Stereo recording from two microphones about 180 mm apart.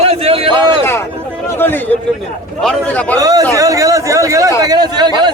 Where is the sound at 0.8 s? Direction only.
15° left (ahead or behind).